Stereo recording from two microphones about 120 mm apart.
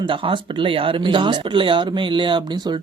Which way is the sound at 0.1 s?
45° right (ahead or behind).